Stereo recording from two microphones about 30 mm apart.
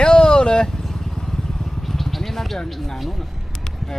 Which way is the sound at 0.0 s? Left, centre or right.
Left.